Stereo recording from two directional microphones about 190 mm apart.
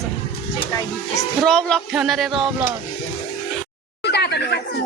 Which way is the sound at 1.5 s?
5° left (ahead or behind).